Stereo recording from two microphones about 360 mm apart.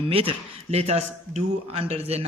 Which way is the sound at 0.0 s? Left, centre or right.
Centre.